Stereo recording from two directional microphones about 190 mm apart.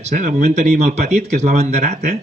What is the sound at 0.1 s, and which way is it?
Speech, 40° right (ahead or behind).